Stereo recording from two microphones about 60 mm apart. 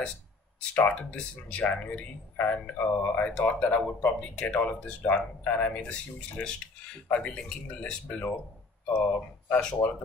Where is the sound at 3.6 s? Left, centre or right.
Left.